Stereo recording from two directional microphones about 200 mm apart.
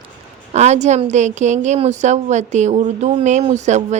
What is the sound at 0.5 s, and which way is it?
A woman's voice, 35° right (ahead or behind).